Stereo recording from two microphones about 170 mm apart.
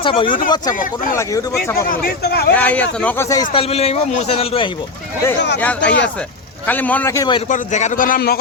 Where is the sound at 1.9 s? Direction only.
60° left (ahead or behind).